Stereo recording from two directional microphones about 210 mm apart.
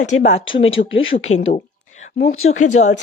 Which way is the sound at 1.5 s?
35° left (ahead or behind).